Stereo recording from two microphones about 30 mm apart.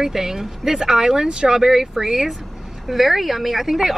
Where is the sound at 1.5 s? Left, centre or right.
Centre.